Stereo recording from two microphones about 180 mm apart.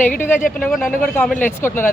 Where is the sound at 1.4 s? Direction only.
10° left (ahead or behind).